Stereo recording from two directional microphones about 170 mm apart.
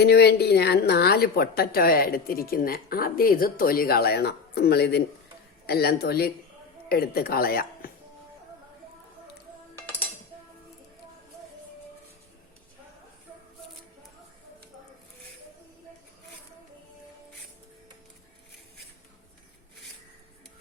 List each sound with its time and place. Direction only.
0.0 s speech: 75° left (ahead or behind)